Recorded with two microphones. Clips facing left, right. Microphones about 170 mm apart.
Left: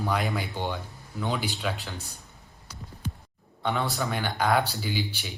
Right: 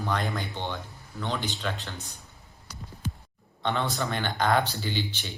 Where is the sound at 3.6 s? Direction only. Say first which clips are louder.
Even; 5° left (ahead or behind).